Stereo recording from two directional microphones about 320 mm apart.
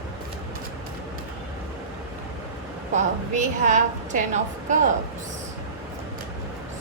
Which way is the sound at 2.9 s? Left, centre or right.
Right.